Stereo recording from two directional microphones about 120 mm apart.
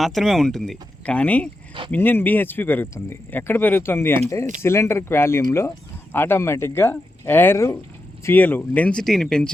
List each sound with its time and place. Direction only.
0.0 s speech: centre (ahead or behind)